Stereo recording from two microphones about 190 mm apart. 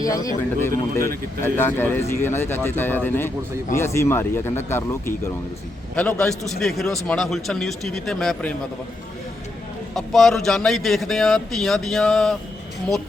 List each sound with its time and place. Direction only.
0.0 s a man's voice: 20° left (ahead or behind)
9.9 s a man's voice: centre (ahead or behind)